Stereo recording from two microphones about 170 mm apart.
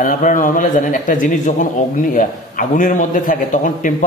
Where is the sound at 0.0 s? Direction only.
50° left (ahead or behind).